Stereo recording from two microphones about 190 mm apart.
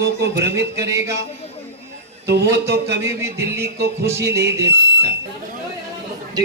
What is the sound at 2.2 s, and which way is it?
Speech, 60° right (ahead or behind).